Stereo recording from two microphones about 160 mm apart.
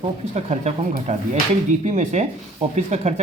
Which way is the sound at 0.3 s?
45° right (ahead or behind).